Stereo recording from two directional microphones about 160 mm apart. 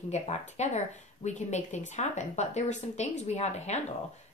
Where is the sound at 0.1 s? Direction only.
45° left (ahead or behind).